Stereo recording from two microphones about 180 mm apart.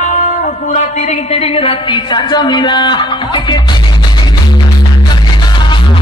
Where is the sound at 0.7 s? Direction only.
35° left (ahead or behind).